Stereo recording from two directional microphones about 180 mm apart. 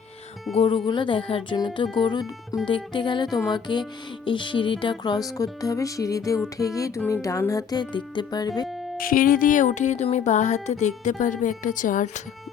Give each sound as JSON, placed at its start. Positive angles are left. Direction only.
{"t": 0.5, "sound": "speech", "side_deg": 35}
{"t": 6.6, "sound": "music", "side_deg": 20}
{"t": 9.0, "sound": "speech", "side_deg": 50}